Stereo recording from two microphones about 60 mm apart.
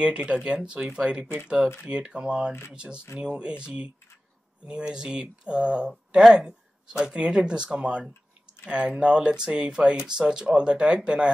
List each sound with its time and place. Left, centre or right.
0.0 s speech: centre